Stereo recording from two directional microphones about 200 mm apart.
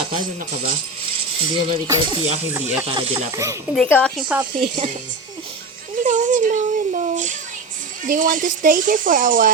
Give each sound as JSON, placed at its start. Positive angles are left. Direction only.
{"t": 0.2, "sound": "speech", "side_deg": -45}
{"t": 1.4, "sound": "speech", "side_deg": -25}
{"t": 2.5, "sound": "speech", "side_deg": -10}
{"t": 2.8, "sound": "speech", "side_deg": -30}
{"t": 3.3, "sound": "speech", "side_deg": -15}
{"t": 3.8, "sound": "a woman's voice", "side_deg": 5}
{"t": 6.0, "sound": "speech", "side_deg": -40}